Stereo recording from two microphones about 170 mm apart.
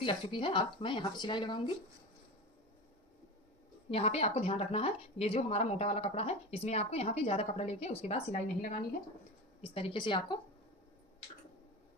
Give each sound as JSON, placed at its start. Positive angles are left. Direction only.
{"t": 0.0, "sound": "speech", "side_deg": 30}
{"t": 3.9, "sound": "speech", "side_deg": 35}